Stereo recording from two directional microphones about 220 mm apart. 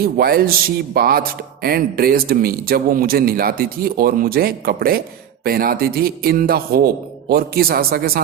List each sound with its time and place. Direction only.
0.0 s speech: 45° right (ahead or behind)